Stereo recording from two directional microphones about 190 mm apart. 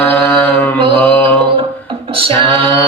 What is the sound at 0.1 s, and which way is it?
Mantra, 10° left (ahead or behind).